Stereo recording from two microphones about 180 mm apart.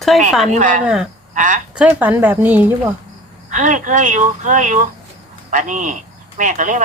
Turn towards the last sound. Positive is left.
turn(degrees=-45)  # may be behind; listen again after turning